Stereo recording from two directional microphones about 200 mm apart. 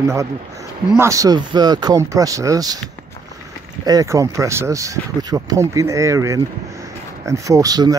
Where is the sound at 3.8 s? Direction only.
20° right (ahead or behind).